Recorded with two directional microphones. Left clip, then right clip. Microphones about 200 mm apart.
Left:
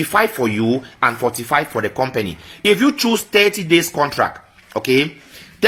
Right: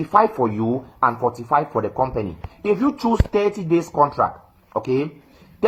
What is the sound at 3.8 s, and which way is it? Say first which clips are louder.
Speech: left 1 dB; 30° left (ahead or behind).